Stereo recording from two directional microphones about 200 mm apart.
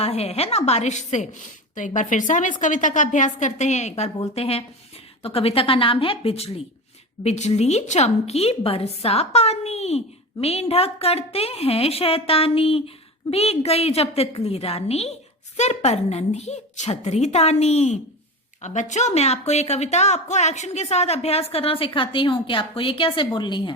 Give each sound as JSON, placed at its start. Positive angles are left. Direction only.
{"t": 0.0, "sound": "a woman's voice", "side_deg": 30}